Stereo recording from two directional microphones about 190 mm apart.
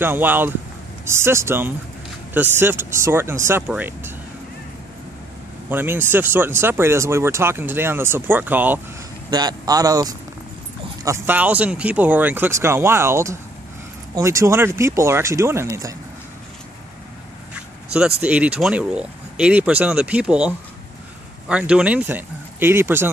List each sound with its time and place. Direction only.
0.0 s speech: 10° right (ahead or behind)
5.7 s speech: 10° right (ahead or behind)
9.3 s a man's voice: 20° right (ahead or behind)
17.6 s a sound: 5° right (ahead or behind)
18.2 s speech: 5° right (ahead or behind)